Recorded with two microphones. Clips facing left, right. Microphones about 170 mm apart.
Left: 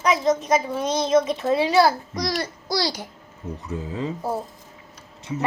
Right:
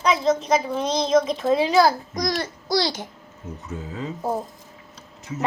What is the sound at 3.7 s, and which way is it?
Speech, 30° left (ahead or behind).